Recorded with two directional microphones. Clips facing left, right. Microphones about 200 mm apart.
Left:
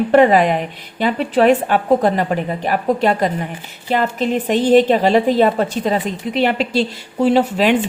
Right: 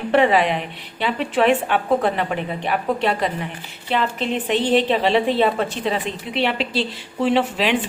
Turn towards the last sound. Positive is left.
turn(degrees=40)  # may be behind; listen again after turning